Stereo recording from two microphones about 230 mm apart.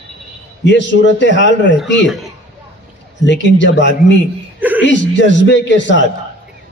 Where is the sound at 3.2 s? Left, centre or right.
Left.